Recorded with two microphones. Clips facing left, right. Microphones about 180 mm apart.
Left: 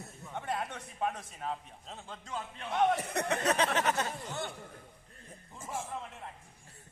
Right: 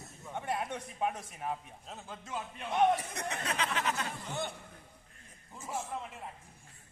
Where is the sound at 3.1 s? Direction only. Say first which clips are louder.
Left 7 dB; 60° left (ahead or behind).